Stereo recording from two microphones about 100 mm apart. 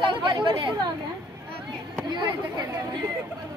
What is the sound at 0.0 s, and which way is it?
Speech, 55° right (ahead or behind).